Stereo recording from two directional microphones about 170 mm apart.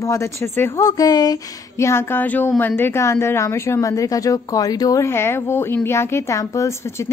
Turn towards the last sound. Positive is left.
turn(degrees=15)  # may be behind; listen again after turning